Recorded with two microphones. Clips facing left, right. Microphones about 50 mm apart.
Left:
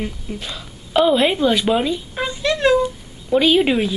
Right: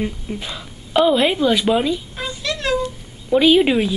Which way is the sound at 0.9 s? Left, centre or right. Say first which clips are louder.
Even; centre.